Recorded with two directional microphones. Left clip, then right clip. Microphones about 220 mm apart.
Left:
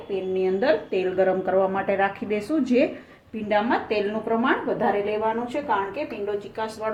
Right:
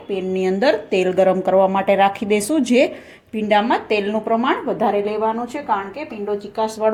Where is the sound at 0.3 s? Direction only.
50° right (ahead or behind).